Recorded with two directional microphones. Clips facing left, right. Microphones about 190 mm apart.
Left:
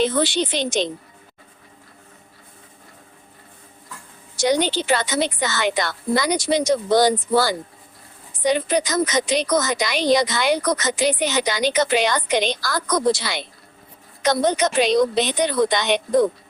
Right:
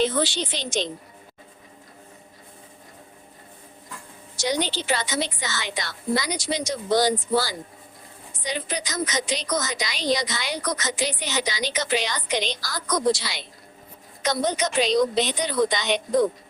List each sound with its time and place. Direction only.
0.0 s a woman's voice: 60° left (ahead or behind)
4.4 s a woman's voice: 55° left (ahead or behind)